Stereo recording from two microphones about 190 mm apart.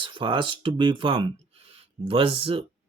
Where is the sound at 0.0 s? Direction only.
25° right (ahead or behind).